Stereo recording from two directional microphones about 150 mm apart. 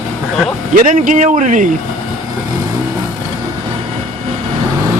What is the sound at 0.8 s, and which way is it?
Speech, 60° right (ahead or behind).